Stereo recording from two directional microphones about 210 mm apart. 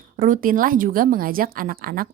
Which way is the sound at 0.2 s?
40° right (ahead or behind).